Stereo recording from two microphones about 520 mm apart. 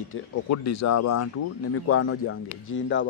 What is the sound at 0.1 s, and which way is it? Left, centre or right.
Speech, left.